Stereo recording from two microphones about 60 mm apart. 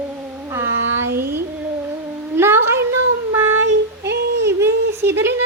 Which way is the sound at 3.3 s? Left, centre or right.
Right.